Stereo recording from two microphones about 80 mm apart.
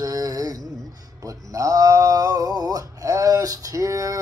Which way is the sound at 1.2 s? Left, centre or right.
Right.